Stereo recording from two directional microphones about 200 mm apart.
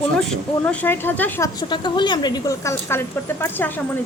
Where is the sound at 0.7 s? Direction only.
10° left (ahead or behind).